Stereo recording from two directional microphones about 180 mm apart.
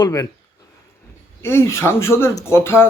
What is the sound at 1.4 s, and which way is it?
Speech, 15° left (ahead or behind).